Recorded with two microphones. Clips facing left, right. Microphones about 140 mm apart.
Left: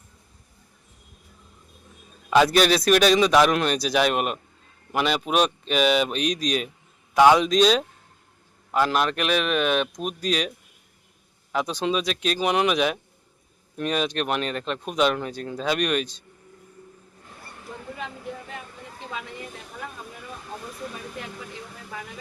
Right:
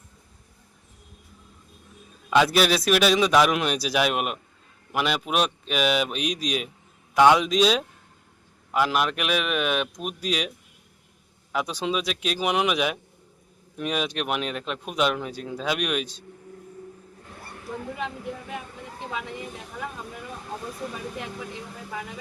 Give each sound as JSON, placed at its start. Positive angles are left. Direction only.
{"t": 2.3, "sound": "speech", "side_deg": 0}
{"t": 11.5, "sound": "speech", "side_deg": -5}
{"t": 17.9, "sound": "speech", "side_deg": -15}